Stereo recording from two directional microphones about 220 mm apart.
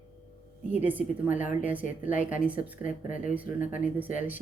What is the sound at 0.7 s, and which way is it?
Speech, 10° right (ahead or behind).